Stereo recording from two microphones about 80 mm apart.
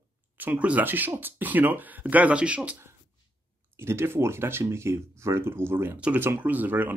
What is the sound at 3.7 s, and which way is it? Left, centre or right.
Speech, right.